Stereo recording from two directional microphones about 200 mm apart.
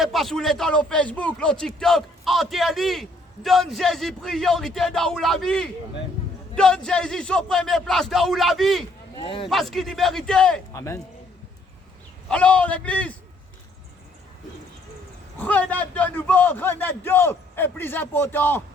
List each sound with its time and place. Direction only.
0.0 s a man's voice: centre (ahead or behind)
9.1 s speech: 25° left (ahead or behind)
9.5 s a man's voice: centre (ahead or behind)
12.3 s a man's voice: 5° left (ahead or behind)
15.4 s a man's voice: 10° left (ahead or behind)